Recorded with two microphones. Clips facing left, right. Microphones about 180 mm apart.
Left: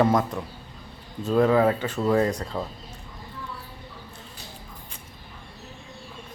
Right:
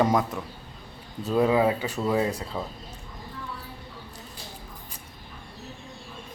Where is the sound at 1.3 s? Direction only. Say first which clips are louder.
Left 2 dB; 10° right (ahead or behind).